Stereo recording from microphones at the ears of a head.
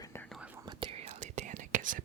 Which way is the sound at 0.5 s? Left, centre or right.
Right.